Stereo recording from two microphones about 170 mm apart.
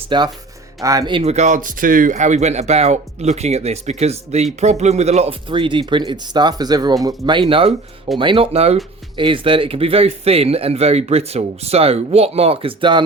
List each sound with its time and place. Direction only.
0.1 s speech: 30° right (ahead or behind)